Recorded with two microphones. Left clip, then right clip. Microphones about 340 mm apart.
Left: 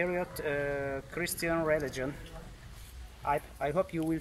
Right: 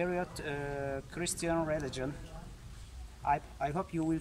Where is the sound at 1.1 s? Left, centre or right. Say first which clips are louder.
Left 3 dB; centre.